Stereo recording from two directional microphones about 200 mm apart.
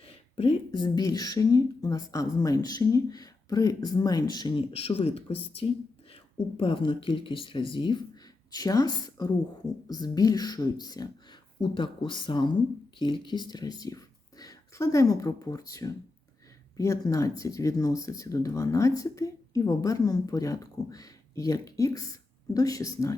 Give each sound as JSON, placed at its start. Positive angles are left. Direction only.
{"t": 0.0, "sound": "speech", "side_deg": 30}